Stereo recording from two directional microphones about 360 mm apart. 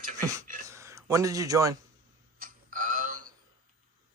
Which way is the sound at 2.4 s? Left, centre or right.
Right.